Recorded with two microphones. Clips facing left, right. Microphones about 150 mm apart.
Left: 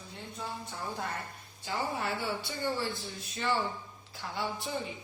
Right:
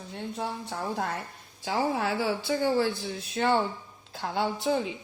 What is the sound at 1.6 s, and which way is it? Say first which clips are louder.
A woman's voice: right 6 dB; 90° right.